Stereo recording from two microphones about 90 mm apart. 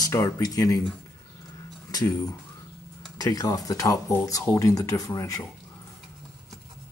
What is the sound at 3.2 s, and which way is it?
Speech, 45° left (ahead or behind).